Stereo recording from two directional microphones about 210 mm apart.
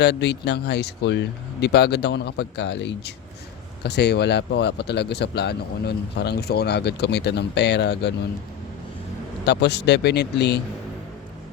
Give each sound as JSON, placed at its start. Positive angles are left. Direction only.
{"t": 0.0, "sound": "speech", "side_deg": 55}
{"t": 9.5, "sound": "speech", "side_deg": 55}